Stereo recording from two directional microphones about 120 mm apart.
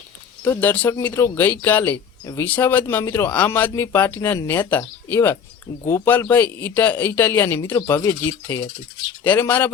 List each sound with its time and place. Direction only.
0.4 s a man's voice: 15° left (ahead or behind)
9.2 s speech: 15° left (ahead or behind)